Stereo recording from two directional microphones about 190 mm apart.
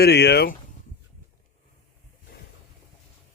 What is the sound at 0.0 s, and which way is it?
Speech, 60° left (ahead or behind).